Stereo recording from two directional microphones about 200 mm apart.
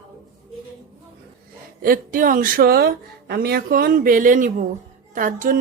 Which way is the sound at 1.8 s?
45° right (ahead or behind).